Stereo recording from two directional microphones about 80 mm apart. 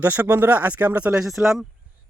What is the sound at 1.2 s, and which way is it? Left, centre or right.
Speech, centre.